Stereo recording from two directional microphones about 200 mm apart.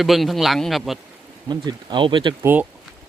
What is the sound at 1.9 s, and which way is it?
Speech, 25° right (ahead or behind).